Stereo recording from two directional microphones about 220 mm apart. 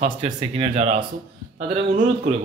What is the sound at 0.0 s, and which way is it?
Speech, 25° right (ahead or behind).